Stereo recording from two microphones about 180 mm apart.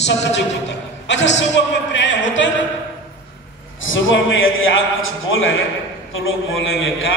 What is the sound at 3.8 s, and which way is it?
A man's voice, 90° left.